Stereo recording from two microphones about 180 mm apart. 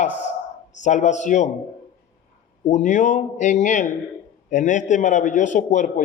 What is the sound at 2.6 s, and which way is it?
A man's voice, 45° left (ahead or behind).